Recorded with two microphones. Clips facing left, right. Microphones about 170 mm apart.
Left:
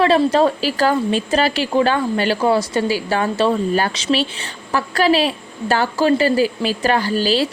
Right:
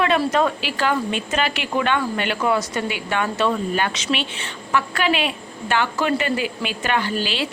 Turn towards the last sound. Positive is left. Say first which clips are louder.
# left 6 dB
turn(degrees=40)  # may be behind; listen again after turning